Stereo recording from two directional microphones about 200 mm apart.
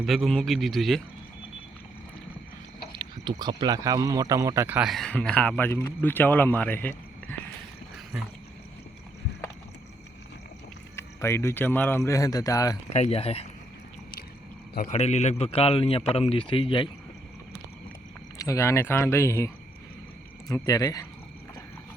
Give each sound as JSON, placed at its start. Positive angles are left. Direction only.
{"t": 0.0, "sound": "speech", "side_deg": 0}
{"t": 3.2, "sound": "speech", "side_deg": -20}
{"t": 10.9, "sound": "speech", "side_deg": 15}
{"t": 12.9, "sound": "speech", "side_deg": 30}
{"t": 14.8, "sound": "a man's voice", "side_deg": 35}
{"t": 18.3, "sound": "speech", "side_deg": 15}
{"t": 20.5, "sound": "speech", "side_deg": 15}